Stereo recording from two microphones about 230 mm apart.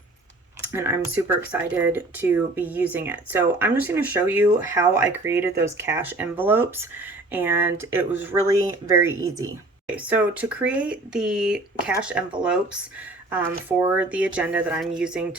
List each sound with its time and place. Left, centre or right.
0.7 s speech: centre
14.0 s speech: centre